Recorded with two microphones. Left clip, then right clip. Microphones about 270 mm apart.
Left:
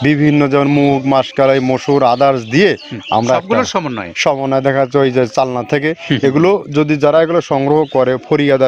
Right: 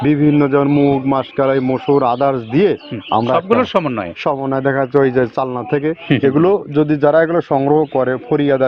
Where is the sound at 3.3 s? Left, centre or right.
Centre.